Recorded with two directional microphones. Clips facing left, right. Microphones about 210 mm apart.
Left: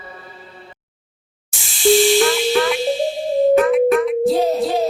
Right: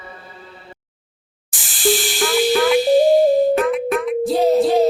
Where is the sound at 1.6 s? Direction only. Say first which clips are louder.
Left 6 dB; centre (ahead or behind).